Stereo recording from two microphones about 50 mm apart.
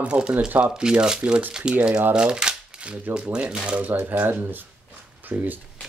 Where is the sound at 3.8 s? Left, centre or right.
Right.